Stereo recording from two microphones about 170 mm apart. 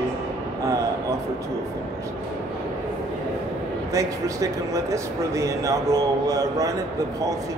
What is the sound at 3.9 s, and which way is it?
Speech, 20° right (ahead or behind).